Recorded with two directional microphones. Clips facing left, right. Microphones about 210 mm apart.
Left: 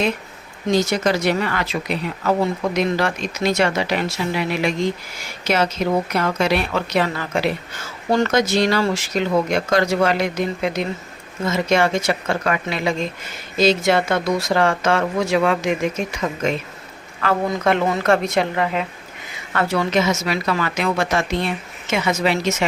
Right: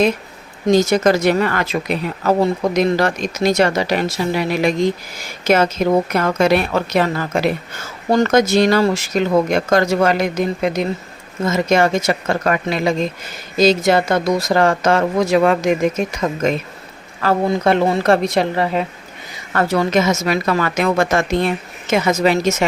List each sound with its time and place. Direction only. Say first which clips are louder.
0.7 s a woman's voice: right 5 dB; 45° right (ahead or behind)